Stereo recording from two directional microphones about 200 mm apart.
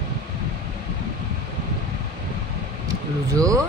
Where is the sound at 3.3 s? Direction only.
15° right (ahead or behind).